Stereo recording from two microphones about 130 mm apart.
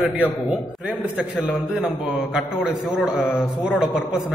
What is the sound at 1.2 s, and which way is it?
A man's voice, 5° right (ahead or behind).